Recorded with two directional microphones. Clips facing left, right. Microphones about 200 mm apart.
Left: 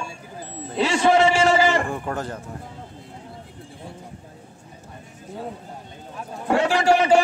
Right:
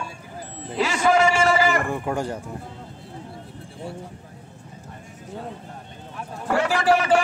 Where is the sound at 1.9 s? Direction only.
10° right (ahead or behind).